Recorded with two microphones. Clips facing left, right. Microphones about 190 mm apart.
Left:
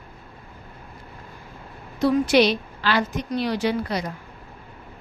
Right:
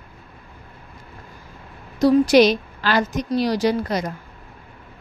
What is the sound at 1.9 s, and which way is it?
A woman's voice, 40° right (ahead or behind).